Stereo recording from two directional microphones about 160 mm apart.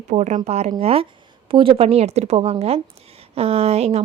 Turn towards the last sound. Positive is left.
turn(degrees=-40)  # may be behind; listen again after turning